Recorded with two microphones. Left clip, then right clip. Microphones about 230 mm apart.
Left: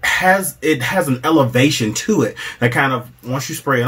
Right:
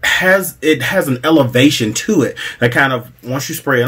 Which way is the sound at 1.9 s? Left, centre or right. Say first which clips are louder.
Right 2 dB; left.